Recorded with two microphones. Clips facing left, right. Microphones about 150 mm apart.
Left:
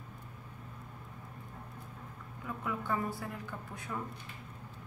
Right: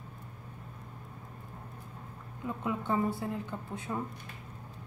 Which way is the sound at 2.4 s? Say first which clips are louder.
Right 4 dB; 25° right (ahead or behind).